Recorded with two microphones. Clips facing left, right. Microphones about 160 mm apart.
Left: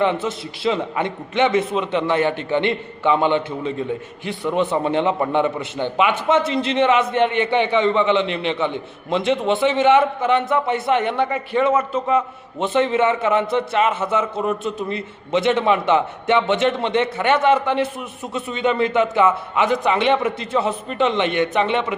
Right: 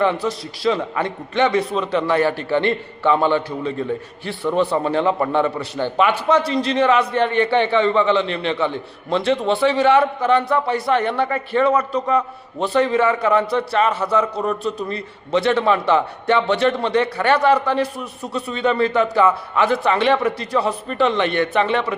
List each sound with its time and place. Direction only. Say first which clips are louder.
0.0 s a man's voice: right 1 dB; 25° left (ahead or behind)